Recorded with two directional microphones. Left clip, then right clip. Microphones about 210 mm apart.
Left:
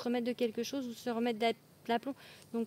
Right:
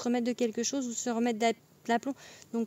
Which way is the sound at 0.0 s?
45° right (ahead or behind).